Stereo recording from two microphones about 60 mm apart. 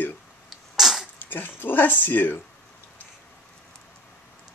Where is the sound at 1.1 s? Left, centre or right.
Left.